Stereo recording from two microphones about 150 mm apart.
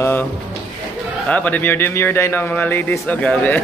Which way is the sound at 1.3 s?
10° left (ahead or behind).